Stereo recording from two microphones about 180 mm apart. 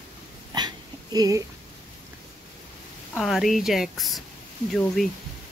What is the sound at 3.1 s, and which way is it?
Speech, centre (ahead or behind).